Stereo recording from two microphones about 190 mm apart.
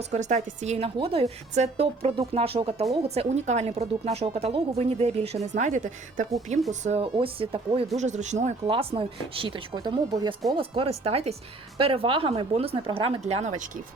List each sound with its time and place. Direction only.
0.0 s a woman's voice: 40° right (ahead or behind)